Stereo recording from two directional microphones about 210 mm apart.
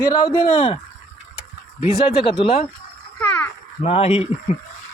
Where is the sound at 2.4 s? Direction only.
30° left (ahead or behind).